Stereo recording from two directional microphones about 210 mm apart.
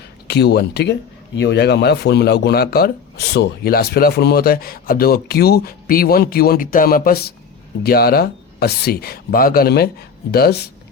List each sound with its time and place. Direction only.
0.3 s speech: 50° left (ahead or behind)